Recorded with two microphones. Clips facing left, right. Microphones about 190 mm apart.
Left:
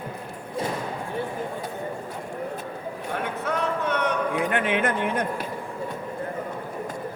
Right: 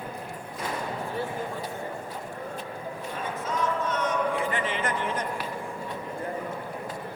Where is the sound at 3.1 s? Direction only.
65° left (ahead or behind).